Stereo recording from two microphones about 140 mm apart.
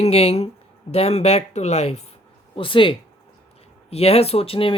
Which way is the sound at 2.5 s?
40° left (ahead or behind).